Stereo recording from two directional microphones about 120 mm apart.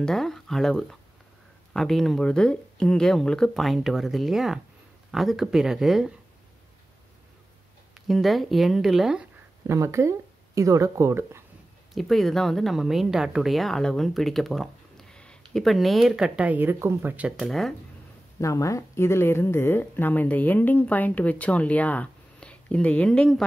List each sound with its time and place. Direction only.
0.0 s speech: 5° left (ahead or behind)
8.1 s speech: centre (ahead or behind)
9.7 s speech: 25° right (ahead or behind)
11.9 s speech: centre (ahead or behind); by 17.3 s 15° right (ahead or behind)
17.4 s speech: centre (ahead or behind)
18.4 s speech: 25° left (ahead or behind); by 23.4 s 5° left (ahead or behind)